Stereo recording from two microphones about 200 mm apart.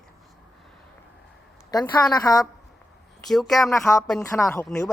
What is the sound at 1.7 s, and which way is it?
Speech, 20° left (ahead or behind).